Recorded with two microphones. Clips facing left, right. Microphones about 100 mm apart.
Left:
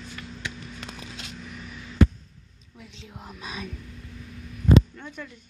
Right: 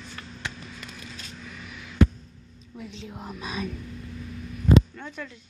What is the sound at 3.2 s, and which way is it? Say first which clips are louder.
Whispering: right 3 dB; 40° right (ahead or behind).